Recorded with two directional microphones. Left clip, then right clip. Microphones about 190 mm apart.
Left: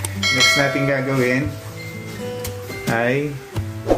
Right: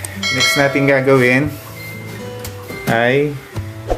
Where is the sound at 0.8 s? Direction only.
45° right (ahead or behind).